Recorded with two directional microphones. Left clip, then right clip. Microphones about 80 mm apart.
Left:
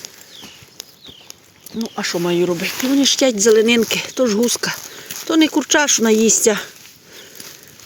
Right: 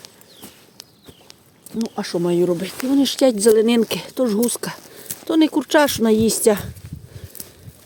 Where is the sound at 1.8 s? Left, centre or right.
Right; by 6.7 s centre.